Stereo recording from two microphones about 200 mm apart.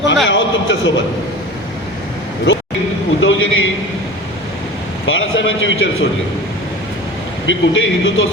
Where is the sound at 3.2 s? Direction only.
75° left (ahead or behind).